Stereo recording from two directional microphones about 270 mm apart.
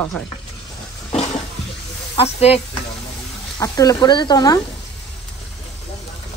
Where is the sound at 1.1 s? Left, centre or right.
Left.